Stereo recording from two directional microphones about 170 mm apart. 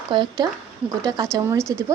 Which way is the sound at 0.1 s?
25° right (ahead or behind).